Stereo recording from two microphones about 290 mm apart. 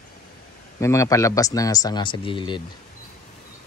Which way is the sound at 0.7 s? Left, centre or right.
Centre.